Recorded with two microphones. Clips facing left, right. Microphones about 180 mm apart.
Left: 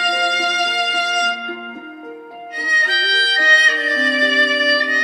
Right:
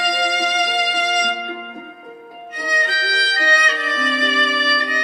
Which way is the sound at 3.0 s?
35° left (ahead or behind).